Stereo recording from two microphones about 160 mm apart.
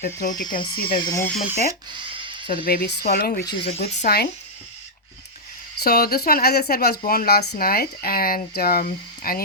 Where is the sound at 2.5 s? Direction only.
65° left (ahead or behind).